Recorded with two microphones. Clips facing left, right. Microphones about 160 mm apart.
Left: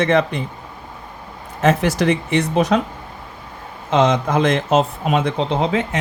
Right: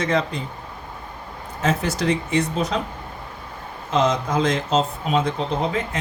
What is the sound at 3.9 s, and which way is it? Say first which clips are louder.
Speech: left 4 dB; 75° left (ahead or behind).